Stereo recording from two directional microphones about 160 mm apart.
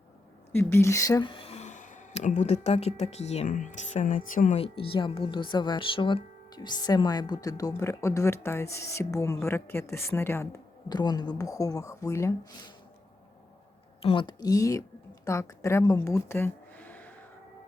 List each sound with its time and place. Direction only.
0.5 s speech: 15° left (ahead or behind)
14.0 s a woman's voice: 30° left (ahead or behind); by 17.1 s 10° left (ahead or behind)